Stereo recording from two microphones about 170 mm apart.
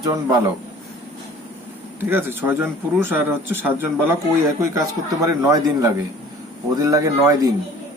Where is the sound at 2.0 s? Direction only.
15° right (ahead or behind).